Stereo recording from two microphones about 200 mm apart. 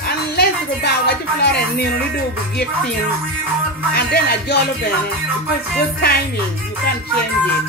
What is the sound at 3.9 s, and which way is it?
Speech, 50° left (ahead or behind).